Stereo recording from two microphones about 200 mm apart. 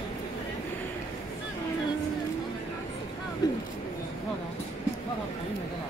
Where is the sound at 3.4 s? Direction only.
20° left (ahead or behind).